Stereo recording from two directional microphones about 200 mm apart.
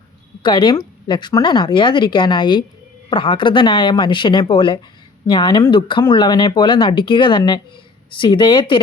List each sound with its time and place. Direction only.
0.4 s speech: 20° left (ahead or behind)